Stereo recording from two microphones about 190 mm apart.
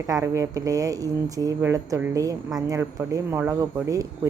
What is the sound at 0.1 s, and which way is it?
A woman's voice, 15° right (ahead or behind).